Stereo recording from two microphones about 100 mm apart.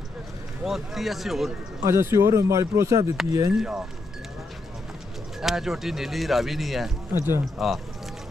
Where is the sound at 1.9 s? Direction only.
30° right (ahead or behind).